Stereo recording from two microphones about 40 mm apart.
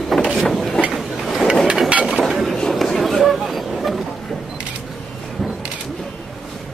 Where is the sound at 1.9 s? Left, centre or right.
Right.